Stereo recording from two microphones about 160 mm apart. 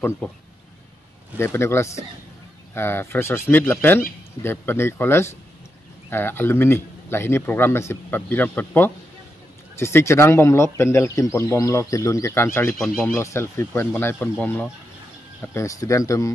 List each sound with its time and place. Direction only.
0.2 s speech: 5° left (ahead or behind)
1.4 s speech: 15° left (ahead or behind)
12.7 s speech: centre (ahead or behind)
13.0 s speech: 15° left (ahead or behind)